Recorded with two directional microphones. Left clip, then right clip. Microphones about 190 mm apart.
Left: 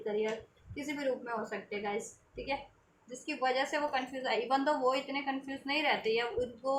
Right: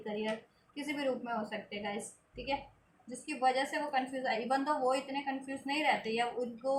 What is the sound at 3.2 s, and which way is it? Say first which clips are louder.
A woman's voice: right 1 dB; 15° left (ahead or behind).